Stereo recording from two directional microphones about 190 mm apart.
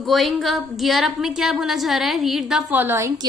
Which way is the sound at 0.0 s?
Centre (ahead or behind).